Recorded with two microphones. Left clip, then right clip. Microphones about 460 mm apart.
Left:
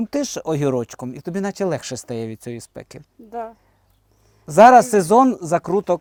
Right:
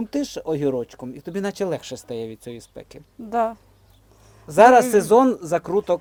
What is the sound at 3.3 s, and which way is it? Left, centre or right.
Speech, right.